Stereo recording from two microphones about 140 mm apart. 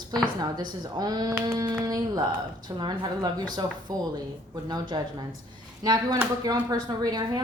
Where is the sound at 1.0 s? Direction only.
30° right (ahead or behind).